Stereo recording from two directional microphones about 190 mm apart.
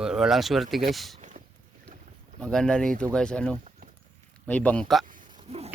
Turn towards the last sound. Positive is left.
turn(degrees=-30)  # may be behind; listen again after turning